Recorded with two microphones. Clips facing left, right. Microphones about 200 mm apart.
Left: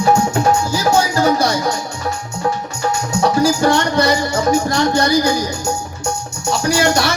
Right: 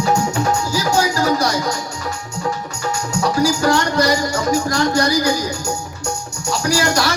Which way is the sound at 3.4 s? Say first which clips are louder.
Even; 25° left (ahead or behind).